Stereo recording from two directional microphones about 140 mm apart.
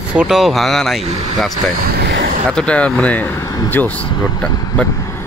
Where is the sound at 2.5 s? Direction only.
10° left (ahead or behind).